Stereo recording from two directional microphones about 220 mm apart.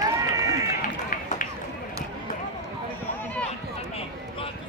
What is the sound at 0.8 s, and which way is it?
Run, 35° left (ahead or behind).